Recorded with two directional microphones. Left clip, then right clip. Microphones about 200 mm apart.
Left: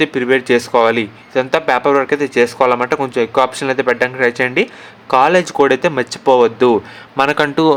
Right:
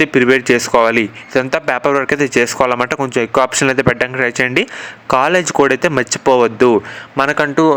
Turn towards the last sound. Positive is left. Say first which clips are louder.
# even
turn(degrees=-10)  # may be behind; listen again after turning